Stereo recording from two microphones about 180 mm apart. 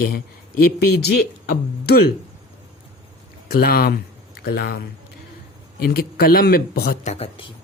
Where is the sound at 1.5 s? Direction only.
65° left (ahead or behind).